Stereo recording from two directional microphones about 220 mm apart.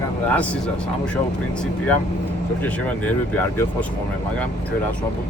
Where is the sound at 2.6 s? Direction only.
5° left (ahead or behind).